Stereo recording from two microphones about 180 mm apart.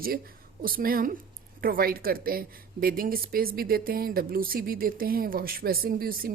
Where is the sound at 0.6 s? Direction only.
55° right (ahead or behind).